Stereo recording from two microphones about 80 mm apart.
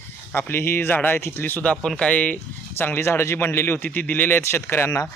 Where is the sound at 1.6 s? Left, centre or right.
Centre; by 4.9 s left.